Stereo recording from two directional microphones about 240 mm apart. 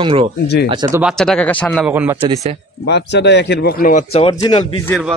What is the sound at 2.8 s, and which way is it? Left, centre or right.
Speech, left.